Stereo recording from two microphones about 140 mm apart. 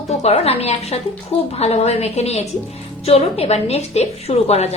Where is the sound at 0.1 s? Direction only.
50° left (ahead or behind).